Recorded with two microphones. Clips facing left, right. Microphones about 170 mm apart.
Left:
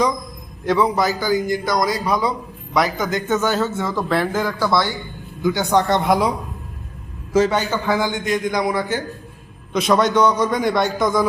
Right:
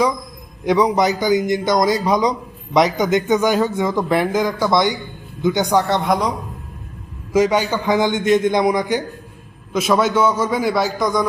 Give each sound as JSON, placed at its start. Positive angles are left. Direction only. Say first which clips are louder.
{"t": 0.6, "sound": "a man's voice", "louder": "right 2 dB", "side_deg": -15}
{"t": 5.7, "sound": "a man's voice", "louder": "even", "side_deg": 0}
{"t": 7.3, "sound": "speech", "louder": "right 1 dB", "side_deg": -10}
{"t": 9.7, "sound": "a man's voice", "louder": "even", "side_deg": -5}